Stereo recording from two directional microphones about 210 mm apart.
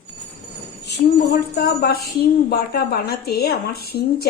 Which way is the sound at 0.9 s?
50° left (ahead or behind).